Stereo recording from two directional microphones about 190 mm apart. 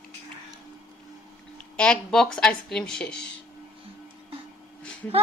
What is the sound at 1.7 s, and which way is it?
A woman's voice, 5° left (ahead or behind).